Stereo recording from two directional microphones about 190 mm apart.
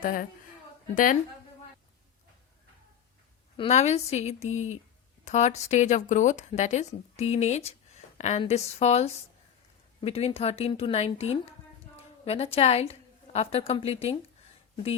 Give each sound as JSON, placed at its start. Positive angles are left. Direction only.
{"t": 0.0, "sound": "a woman's voice", "side_deg": 45}
{"t": 3.6, "sound": "a woman's voice", "side_deg": 35}